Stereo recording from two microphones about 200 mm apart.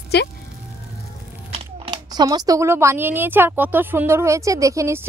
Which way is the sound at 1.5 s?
25° right (ahead or behind).